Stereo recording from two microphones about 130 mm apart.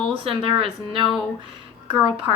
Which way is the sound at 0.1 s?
45° right (ahead or behind).